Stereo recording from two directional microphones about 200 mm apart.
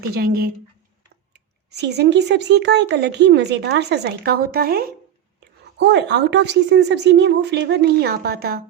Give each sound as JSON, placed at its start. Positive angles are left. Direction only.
{"t": 0.1, "sound": "a woman's voice", "side_deg": -50}
{"t": 5.4, "sound": "speech", "side_deg": -60}